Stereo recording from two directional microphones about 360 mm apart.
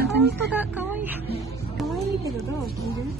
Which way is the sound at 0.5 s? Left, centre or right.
Centre.